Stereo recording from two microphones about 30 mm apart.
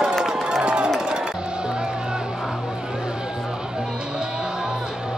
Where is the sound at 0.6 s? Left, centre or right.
Right.